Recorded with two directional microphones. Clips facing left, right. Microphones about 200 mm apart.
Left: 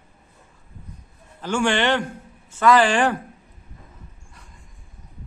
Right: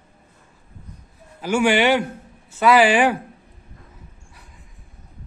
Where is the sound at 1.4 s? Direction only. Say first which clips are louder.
Right 4 dB; 10° right (ahead or behind).